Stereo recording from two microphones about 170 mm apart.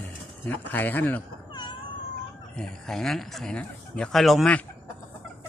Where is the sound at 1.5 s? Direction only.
25° left (ahead or behind).